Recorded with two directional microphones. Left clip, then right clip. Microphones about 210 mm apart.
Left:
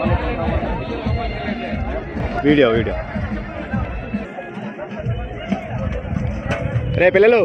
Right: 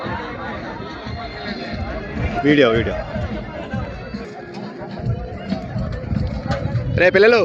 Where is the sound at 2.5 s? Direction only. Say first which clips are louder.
Even; centre (ahead or behind).